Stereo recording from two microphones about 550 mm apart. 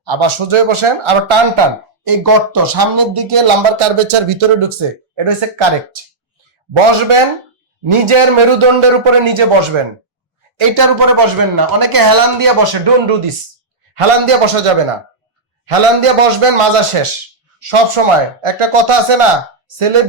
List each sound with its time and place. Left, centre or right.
0.0 s a man's voice: right
2.0 s a man's voice: right
10.6 s speech: right
13.9 s a man's voice: right